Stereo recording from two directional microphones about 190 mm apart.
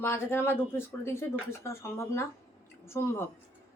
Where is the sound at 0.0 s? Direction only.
10° left (ahead or behind).